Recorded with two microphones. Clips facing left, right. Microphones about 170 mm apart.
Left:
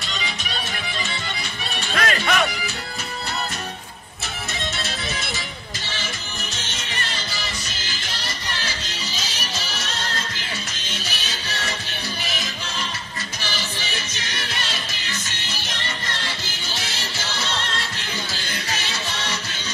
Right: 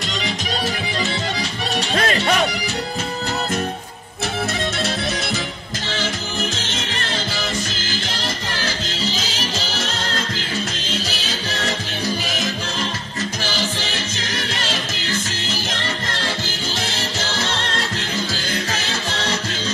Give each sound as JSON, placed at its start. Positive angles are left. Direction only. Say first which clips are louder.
{"t": 2.0, "sound": "music", "louder": "right 2 dB", "side_deg": -30}
{"t": 9.0, "sound": "music", "louder": "right 9 dB", "side_deg": -90}
{"t": 18.7, "sound": "music", "louder": "right 4 dB", "side_deg": -50}